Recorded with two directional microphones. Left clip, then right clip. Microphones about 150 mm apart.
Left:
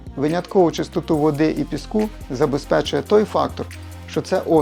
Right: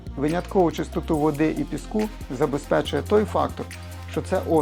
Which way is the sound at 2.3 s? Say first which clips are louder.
Left 4 dB; 40° left (ahead or behind).